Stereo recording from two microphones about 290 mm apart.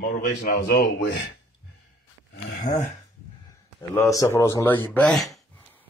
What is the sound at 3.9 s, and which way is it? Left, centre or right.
Speech, centre.